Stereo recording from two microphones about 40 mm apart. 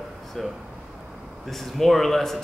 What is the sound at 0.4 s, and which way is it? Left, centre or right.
Speech, centre.